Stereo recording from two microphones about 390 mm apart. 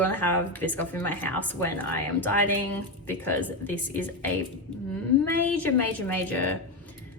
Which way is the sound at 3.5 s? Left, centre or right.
Centre.